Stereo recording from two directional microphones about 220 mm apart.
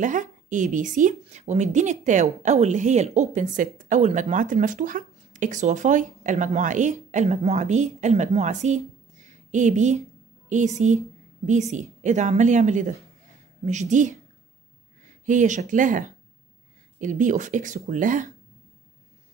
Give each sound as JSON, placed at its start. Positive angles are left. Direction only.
{"t": 0.0, "sound": "speech", "side_deg": -35}